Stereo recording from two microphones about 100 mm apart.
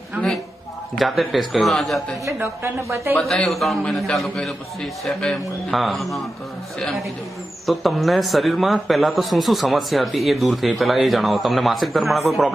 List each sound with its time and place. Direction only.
0.9 s a man's voice: centre (ahead or behind)
2.4 s a woman's voice: 25° right (ahead or behind)
3.2 s a man's voice: 5° left (ahead or behind)
7.7 s a man's voice: centre (ahead or behind)